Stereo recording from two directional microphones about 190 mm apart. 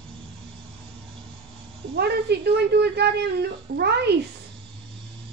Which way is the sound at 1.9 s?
60° right (ahead or behind).